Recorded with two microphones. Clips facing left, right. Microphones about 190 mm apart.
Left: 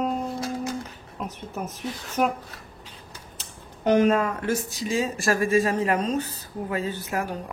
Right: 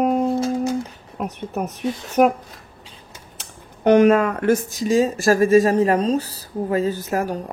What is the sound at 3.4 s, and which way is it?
Speech, 70° right (ahead or behind).